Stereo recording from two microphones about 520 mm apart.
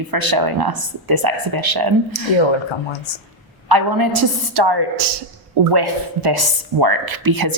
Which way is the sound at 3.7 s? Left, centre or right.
Right.